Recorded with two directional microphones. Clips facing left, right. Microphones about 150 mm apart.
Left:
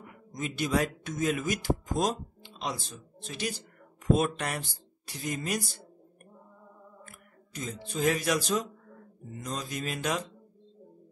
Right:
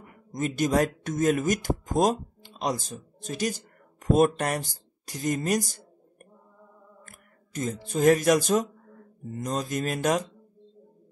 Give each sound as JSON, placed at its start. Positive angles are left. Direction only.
{"t": 0.3, "sound": "speech", "side_deg": -45}
{"t": 7.1, "sound": "speech", "side_deg": -45}
{"t": 9.3, "sound": "mantra", "side_deg": -45}